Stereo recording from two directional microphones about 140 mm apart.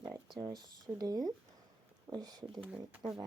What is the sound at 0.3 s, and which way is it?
Speech, 30° right (ahead or behind).